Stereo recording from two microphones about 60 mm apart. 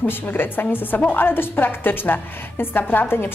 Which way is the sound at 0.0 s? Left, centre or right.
Left.